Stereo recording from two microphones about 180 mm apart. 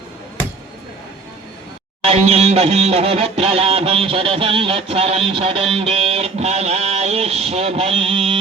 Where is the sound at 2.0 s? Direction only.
35° right (ahead or behind).